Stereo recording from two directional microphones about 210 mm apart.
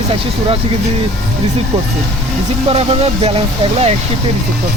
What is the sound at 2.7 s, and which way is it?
Speech, 30° right (ahead or behind).